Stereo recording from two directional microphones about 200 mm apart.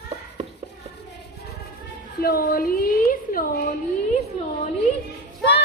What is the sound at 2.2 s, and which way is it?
A woman's voice, 45° left (ahead or behind).